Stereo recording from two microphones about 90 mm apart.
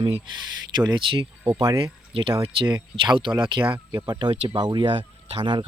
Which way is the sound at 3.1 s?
55° right (ahead or behind).